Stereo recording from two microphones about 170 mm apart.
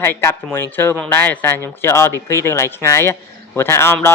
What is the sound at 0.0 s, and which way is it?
Speech, 15° left (ahead or behind).